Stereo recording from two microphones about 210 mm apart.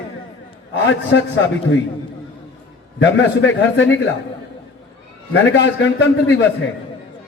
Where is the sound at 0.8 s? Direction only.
60° left (ahead or behind).